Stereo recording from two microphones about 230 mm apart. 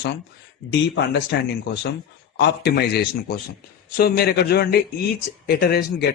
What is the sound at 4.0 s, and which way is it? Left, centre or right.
A man's voice, left.